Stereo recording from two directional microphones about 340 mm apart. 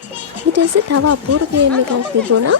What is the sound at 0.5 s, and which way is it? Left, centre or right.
Speech, right.